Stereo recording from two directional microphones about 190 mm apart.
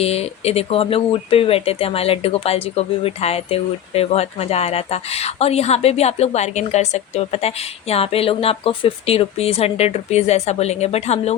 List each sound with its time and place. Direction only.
0.0 s speech: 30° left (ahead or behind)